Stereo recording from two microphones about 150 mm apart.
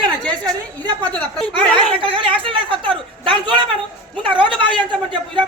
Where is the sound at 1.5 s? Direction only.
35° right (ahead or behind).